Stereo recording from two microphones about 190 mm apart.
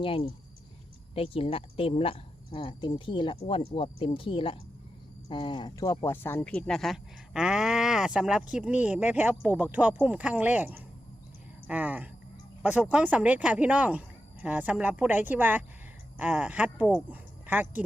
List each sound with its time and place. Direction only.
0.0 s speech: 30° left (ahead or behind); by 17.8 s 10° right (ahead or behind)